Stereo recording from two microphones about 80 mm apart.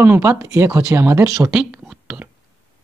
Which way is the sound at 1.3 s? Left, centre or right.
Centre.